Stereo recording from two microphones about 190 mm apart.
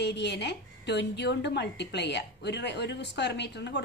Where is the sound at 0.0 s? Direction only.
60° left (ahead or behind).